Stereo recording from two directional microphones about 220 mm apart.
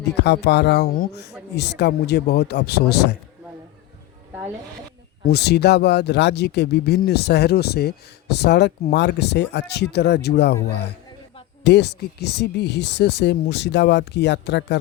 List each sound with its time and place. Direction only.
0.0 s speech: 50° left (ahead or behind)
5.2 s speech: 45° left (ahead or behind)
11.6 s speech: 50° left (ahead or behind)